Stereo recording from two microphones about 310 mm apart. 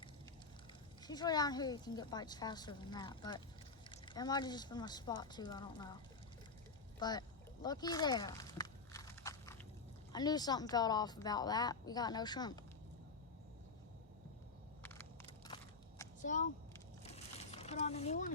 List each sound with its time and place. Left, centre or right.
1.0 s a woman's voice: centre
7.0 s duck: centre
10.1 s a woman's voice: centre
14.8 s crushing: centre
16.2 s speech: left
17.0 s a sound: centre